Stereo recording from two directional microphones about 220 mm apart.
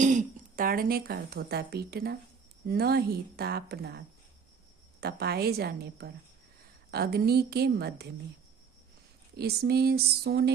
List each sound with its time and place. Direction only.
0.0 s a woman's voice: 35° right (ahead or behind)
9.3 s a woman's voice: 45° right (ahead or behind)